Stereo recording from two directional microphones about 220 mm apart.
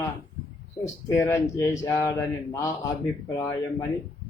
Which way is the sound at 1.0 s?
15° left (ahead or behind).